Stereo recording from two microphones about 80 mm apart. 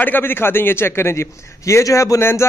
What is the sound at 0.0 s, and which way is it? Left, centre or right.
A man's voice, left.